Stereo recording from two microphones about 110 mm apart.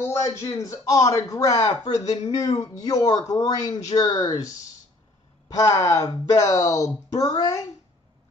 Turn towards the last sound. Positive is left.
turn(degrees=30)  # may be behind; listen again after turning